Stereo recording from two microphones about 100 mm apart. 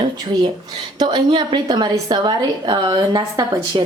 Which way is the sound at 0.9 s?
50° right (ahead or behind).